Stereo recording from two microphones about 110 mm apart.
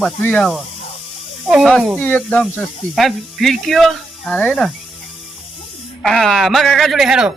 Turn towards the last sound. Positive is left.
turn(degrees=-5)  # may be behind; listen again after turning